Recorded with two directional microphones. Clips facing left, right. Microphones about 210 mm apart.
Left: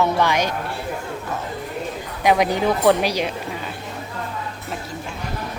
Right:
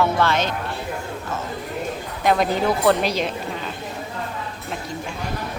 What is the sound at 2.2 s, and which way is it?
A woman's voice, 15° left (ahead or behind).